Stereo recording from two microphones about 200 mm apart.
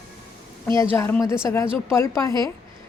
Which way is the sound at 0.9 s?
10° left (ahead or behind).